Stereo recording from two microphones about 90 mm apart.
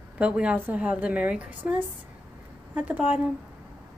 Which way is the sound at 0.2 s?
15° right (ahead or behind).